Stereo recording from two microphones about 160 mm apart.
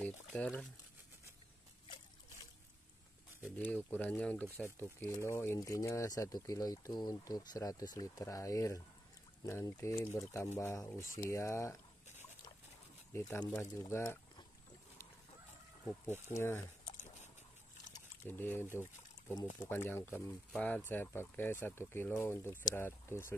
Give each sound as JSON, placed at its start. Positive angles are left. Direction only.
{"t": 0.0, "sound": "boiling", "side_deg": 10}
{"t": 3.4, "sound": "speech", "side_deg": 10}
{"t": 4.7, "sound": "speech", "side_deg": 20}
{"t": 13.1, "sound": "speech", "side_deg": 15}
{"t": 16.3, "sound": "speech", "side_deg": 15}
{"t": 18.2, "sound": "speech", "side_deg": 15}
{"t": 19.7, "sound": "speech", "side_deg": 15}